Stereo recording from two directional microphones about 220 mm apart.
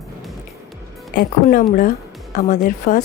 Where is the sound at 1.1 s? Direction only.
40° left (ahead or behind).